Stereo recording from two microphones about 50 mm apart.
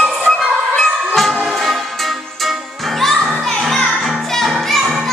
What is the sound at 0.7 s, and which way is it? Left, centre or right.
Music, centre.